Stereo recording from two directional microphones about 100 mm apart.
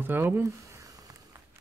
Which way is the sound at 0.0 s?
20° right (ahead or behind).